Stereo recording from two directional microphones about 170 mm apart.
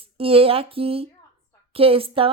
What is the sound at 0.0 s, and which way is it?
Speech, 35° right (ahead or behind).